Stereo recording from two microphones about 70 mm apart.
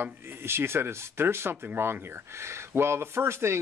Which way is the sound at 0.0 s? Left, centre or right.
Right.